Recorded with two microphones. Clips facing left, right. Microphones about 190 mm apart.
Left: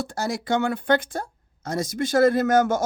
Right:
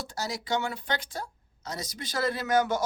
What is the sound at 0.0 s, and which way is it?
Speech, 55° left (ahead or behind).